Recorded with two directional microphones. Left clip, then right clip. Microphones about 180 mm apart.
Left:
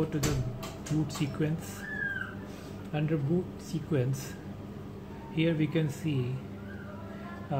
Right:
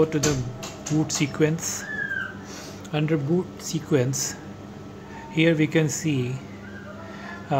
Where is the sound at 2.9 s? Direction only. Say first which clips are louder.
Right 7 dB; 35° right (ahead or behind).